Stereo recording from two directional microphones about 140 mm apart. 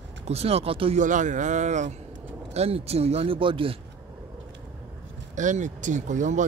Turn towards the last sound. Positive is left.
turn(degrees=-60)  # may be behind; listen again after turning